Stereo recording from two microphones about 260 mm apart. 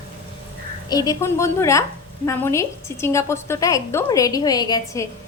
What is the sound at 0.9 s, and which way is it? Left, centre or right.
A woman's voice, centre.